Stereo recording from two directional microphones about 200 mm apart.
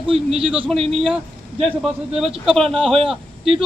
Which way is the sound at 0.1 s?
30° right (ahead or behind).